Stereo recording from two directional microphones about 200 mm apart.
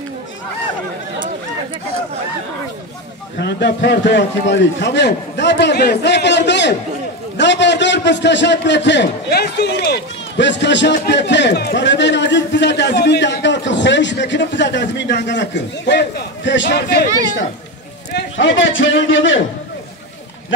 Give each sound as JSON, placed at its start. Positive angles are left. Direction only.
{"t": 3.3, "sound": "a man's voice", "side_deg": 55}